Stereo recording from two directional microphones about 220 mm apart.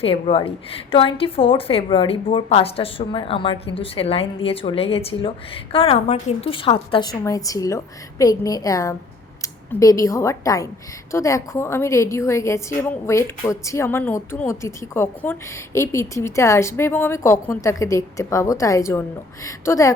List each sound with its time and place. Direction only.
0.0 s a woman's voice: 25° left (ahead or behind)